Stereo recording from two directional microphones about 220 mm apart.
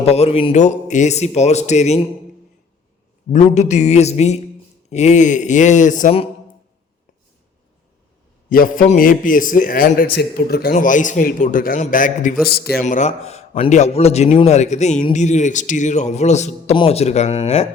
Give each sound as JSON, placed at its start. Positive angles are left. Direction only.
{"t": 0.0, "sound": "a man's voice", "side_deg": 30}
{"t": 3.3, "sound": "a man's voice", "side_deg": 30}
{"t": 8.4, "sound": "a man's voice", "side_deg": 40}